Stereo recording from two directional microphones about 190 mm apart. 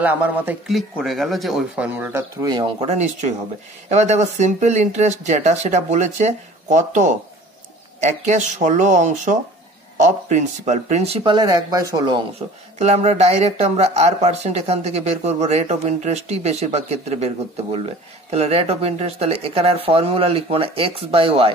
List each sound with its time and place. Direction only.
0.0 s speech: 10° right (ahead or behind)
2.9 s speech: 40° right (ahead or behind); by 12.2 s 20° right (ahead or behind)
12.7 s speech: 35° right (ahead or behind)